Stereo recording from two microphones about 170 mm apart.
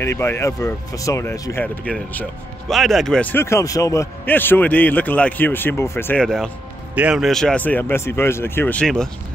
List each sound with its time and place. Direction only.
0.0 s a man's voice: 15° left (ahead or behind)
6.2 s a man's voice: centre (ahead or behind)